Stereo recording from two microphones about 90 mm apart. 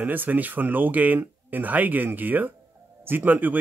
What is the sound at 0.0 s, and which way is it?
Speech, 20° right (ahead or behind).